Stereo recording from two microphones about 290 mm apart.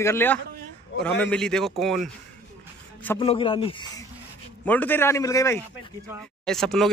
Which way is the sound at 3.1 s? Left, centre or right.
Centre.